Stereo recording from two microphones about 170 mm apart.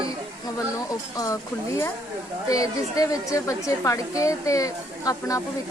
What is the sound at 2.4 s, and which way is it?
A woman's voice, 20° left (ahead or behind).